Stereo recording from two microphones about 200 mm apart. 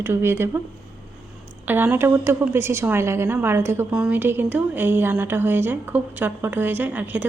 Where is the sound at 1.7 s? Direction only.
10° right (ahead or behind).